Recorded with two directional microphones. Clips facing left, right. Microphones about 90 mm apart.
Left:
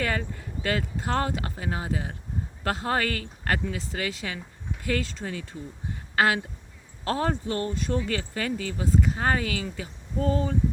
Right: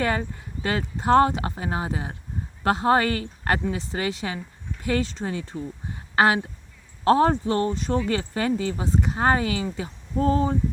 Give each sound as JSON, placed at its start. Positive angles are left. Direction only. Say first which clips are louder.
{"t": 0.0, "sound": "speech", "louder": "right 4 dB", "side_deg": -25}